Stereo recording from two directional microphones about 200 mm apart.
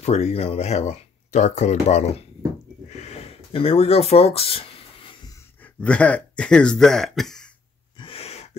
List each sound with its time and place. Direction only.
0.0 s speech: 30° left (ahead or behind)
2.9 s a sound: 35° left (ahead or behind)
5.6 s speech: 5° left (ahead or behind)
8.0 s gasp: 30° left (ahead or behind)